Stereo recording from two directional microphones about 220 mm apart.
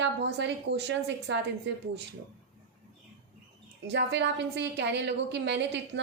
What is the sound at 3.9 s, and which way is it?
A woman's voice, 50° right (ahead or behind).